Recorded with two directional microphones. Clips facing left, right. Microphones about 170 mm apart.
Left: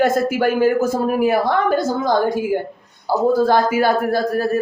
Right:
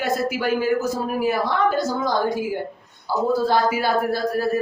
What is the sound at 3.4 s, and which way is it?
A man's voice, 50° left (ahead or behind).